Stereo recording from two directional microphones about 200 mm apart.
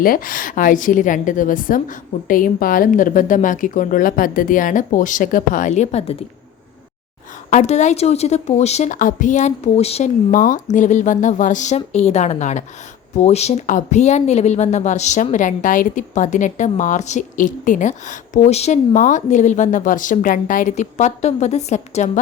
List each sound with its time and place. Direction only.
0.0 s speech: 45° left (ahead or behind)
7.5 s speech: 35° left (ahead or behind)
10.3 s speech: 40° left (ahead or behind)